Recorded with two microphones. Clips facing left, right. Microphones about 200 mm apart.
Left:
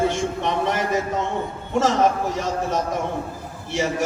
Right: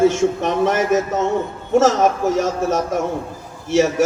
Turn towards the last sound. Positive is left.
turn(degrees=-45)  # may be behind; listen again after turning